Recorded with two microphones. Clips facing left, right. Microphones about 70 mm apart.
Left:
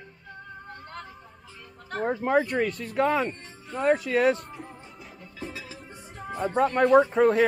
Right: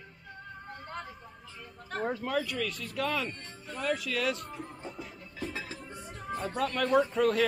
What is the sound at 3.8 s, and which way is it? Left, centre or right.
Speech, left.